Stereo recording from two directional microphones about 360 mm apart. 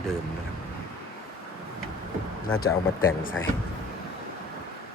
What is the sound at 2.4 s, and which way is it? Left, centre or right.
Speech, left.